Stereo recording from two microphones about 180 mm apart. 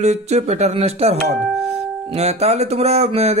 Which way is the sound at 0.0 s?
40° right (ahead or behind).